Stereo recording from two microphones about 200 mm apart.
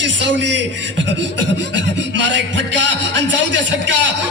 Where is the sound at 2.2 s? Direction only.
65° right (ahead or behind).